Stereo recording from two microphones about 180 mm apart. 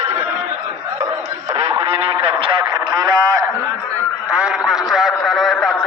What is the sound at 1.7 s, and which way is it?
Vehicle, 30° right (ahead or behind).